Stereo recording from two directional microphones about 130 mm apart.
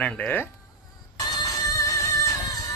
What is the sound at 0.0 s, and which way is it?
Speech, 10° left (ahead or behind).